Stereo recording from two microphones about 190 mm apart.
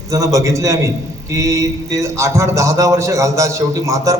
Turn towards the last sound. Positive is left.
turn(degrees=-15)  # may be behind; listen again after turning